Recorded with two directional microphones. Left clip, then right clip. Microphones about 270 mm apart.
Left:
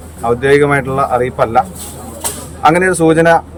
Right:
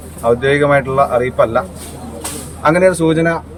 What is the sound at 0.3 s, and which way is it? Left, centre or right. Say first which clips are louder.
Speech: left 2 dB; centre.